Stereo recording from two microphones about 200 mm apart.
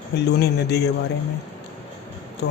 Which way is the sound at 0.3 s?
55° left (ahead or behind).